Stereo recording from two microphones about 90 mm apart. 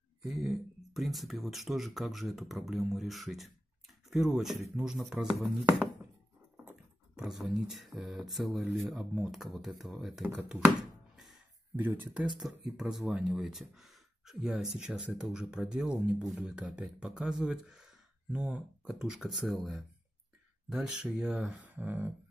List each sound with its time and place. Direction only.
0.2 s speech: 5° right (ahead or behind)
7.2 s speech: 5° right (ahead or behind)
10.5 s music: 5° right (ahead or behind)
11.7 s speech: 20° right (ahead or behind)
12.4 s speech: 5° right (ahead or behind)
20.7 s speech: 10° right (ahead or behind)
21.7 s speech: 20° right (ahead or behind)